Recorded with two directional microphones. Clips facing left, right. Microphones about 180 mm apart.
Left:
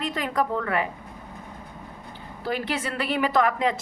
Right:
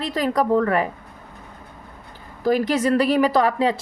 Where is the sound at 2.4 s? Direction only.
40° right (ahead or behind).